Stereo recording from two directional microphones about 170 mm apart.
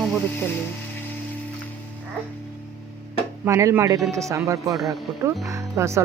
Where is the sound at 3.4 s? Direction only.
15° right (ahead or behind).